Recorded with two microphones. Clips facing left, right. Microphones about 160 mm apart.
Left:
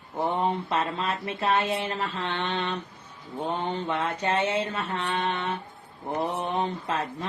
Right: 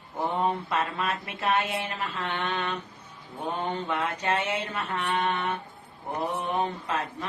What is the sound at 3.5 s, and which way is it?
Speech, 30° left (ahead or behind).